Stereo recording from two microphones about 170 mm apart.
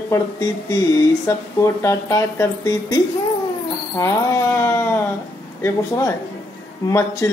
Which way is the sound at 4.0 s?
15° left (ahead or behind).